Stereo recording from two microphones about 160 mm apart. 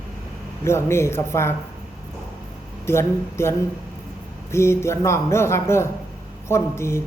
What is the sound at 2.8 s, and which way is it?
Speech, 15° left (ahead or behind).